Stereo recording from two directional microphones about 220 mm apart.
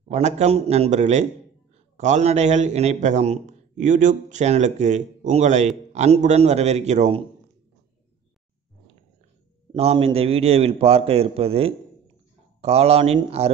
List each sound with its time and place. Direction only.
0.1 s a man's voice: 30° right (ahead or behind)
9.7 s a man's voice: 25° right (ahead or behind)